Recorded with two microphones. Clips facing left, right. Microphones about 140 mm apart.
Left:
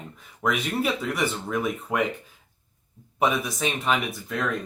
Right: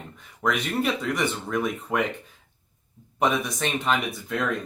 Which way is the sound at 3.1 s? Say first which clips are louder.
Even; centre (ahead or behind).